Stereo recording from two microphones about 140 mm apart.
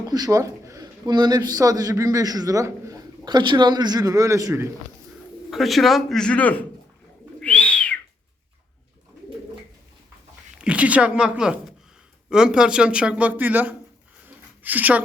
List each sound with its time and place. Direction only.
0.1 s a man's voice: 25° right (ahead or behind)
5.5 s a man's voice: centre (ahead or behind)
7.3 s bird: 10° left (ahead or behind)
10.6 s speech: 10° right (ahead or behind)
14.3 s a sound: 10° right (ahead or behind)